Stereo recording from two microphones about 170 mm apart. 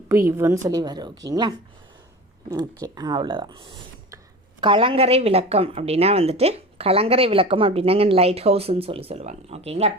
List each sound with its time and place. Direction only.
0.1 s a woman's voice: 15° right (ahead or behind)
2.8 s a woman's voice: 25° right (ahead or behind)